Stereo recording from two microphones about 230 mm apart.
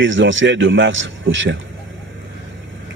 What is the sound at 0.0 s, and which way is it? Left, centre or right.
A man's voice, right.